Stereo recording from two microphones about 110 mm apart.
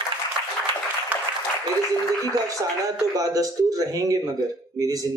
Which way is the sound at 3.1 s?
35° right (ahead or behind).